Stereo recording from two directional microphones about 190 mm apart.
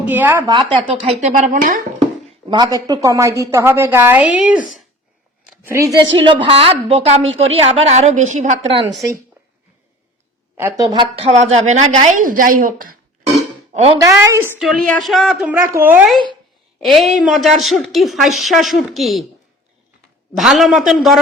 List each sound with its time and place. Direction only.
0.0 s a woman's voice: 10° right (ahead or behind)
0.5 s a woman's voice: 30° right (ahead or behind)
2.5 s a woman's voice: 20° right (ahead or behind)
5.5 s a woman's voice: 10° right (ahead or behind); by 8.9 s 30° right (ahead or behind)
10.6 s a woman's voice: 15° right (ahead or behind)
11.1 s a woman's voice: 30° right (ahead or behind); by 12.9 s 45° right (ahead or behind)
13.3 s burping: 35° right (ahead or behind)
14.0 s a woman's voice: 15° right (ahead or behind)
14.6 s a woman's voice: centre (ahead or behind)
16.8 s a woman's voice: centre (ahead or behind)
20.3 s a woman's voice: centre (ahead or behind)